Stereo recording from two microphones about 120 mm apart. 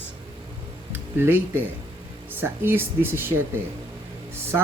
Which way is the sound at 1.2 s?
15° right (ahead or behind).